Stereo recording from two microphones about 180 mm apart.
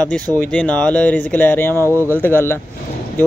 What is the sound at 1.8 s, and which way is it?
Speech, 15° right (ahead or behind).